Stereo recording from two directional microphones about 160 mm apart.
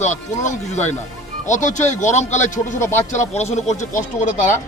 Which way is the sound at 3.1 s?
45° left (ahead or behind).